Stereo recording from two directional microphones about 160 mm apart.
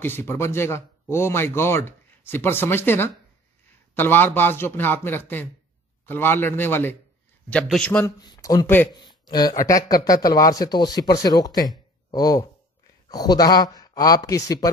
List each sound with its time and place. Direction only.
0.0 s speech: 15° left (ahead or behind)
8.2 s speech: 25° left (ahead or behind)